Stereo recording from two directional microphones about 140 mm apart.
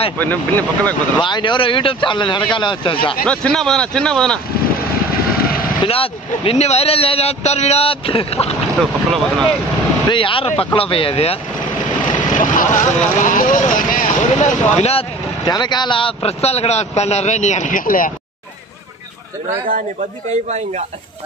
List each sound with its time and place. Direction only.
0.2 s speech: 15° left (ahead or behind)
1.2 s speech: 35° left (ahead or behind)
3.3 s speech: 5° left (ahead or behind)
5.8 s a man's voice: 40° left (ahead or behind)
9.1 s speech: 5° left (ahead or behind)
10.0 s speech: 35° left (ahead or behind)
12.4 s speech: 70° left (ahead or behind); by 15.0 s 50° left (ahead or behind)
15.4 s a man's voice: 30° left (ahead or behind); by 18.1 s 80° left